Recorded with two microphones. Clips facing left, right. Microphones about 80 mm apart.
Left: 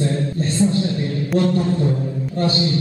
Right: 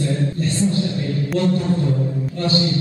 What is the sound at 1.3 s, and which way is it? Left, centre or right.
Music, left.